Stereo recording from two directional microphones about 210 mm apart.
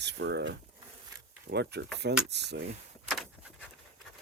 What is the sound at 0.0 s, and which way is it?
Speech, 55° right (ahead or behind).